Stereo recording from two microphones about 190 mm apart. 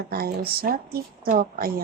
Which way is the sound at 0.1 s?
55° right (ahead or behind).